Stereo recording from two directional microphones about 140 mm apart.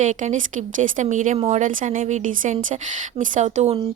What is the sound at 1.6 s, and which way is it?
A woman's voice, 70° right (ahead or behind).